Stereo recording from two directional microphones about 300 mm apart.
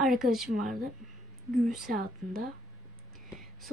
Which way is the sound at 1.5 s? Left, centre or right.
Centre.